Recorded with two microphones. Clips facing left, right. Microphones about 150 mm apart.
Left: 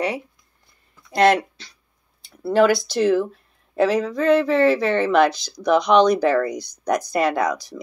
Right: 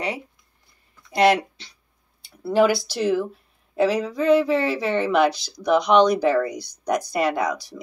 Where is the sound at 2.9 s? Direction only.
5° right (ahead or behind).